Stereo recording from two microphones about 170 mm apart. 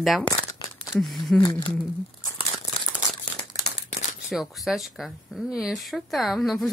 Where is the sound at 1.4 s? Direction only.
30° left (ahead or behind).